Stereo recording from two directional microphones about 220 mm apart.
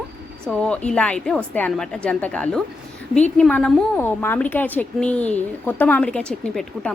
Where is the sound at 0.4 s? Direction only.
5° left (ahead or behind).